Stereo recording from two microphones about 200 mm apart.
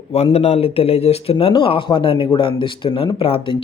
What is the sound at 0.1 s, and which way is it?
Speech, 30° left (ahead or behind).